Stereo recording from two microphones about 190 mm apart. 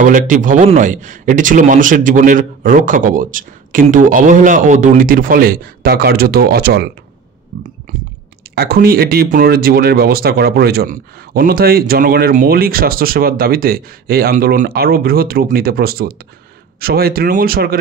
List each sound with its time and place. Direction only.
0.0 s speech: 45° right (ahead or behind)
7.5 s a sound: 50° right (ahead or behind)
8.5 s speech: 55° right (ahead or behind)